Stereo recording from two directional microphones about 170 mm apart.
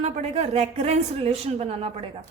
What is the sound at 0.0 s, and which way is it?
A woman's voice, 40° right (ahead or behind).